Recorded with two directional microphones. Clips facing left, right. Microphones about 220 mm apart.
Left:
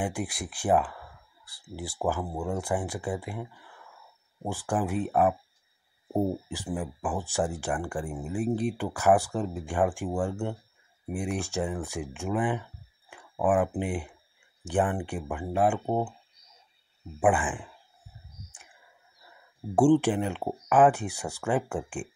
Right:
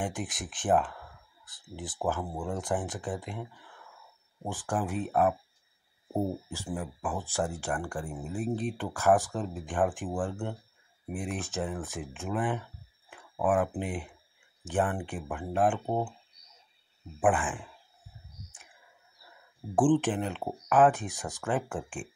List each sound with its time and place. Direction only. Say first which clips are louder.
0.0 s speech: left 3 dB; 10° left (ahead or behind)
4.6 s speech: left 3 dB; 15° left (ahead or behind)
13.4 s speech: left 2 dB; centre (ahead or behind)
13.7 s speech: left 4 dB; 15° left (ahead or behind)
15.1 s speech: left 3 dB; centre (ahead or behind)
15.5 s speech: left 2 dB; 10° left (ahead or behind)
17.2 s speech: left 2 dB; 15° left (ahead or behind)
19.7 s speech: left 3 dB; 10° left (ahead or behind)